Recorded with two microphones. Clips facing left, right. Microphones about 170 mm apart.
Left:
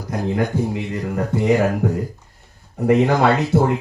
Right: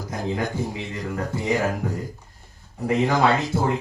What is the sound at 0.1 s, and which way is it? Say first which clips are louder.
Speech: left 6 dB; 60° left (ahead or behind).